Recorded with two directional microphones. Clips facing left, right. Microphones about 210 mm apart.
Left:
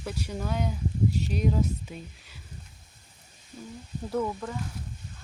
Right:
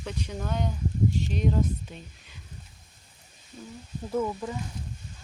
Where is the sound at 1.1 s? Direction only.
40° left (ahead or behind).